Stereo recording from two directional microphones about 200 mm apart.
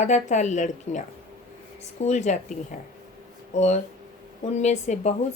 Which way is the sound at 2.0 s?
35° left (ahead or behind).